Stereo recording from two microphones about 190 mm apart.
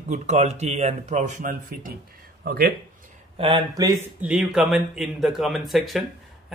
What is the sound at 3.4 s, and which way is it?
Speech, 25° right (ahead or behind).